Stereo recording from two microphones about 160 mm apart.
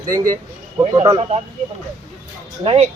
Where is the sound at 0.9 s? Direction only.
40° right (ahead or behind).